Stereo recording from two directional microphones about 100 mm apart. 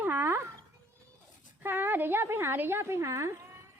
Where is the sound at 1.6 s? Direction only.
20° right (ahead or behind).